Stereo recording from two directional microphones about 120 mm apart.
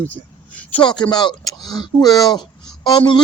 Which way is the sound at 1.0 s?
35° left (ahead or behind).